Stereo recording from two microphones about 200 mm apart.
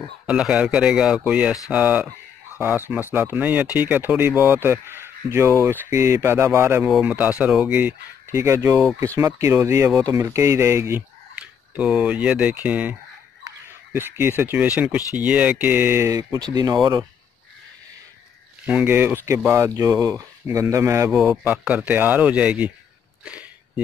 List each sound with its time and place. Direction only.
0.3 s speech: 5° right (ahead or behind)
13.9 s speech: 10° right (ahead or behind)
18.7 s speech: 10° right (ahead or behind)
21.1 s speech: centre (ahead or behind)
23.2 s a sound: 5° right (ahead or behind)